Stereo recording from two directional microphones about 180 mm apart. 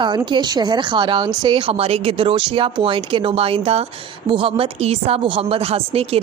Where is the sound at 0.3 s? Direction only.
25° right (ahead or behind).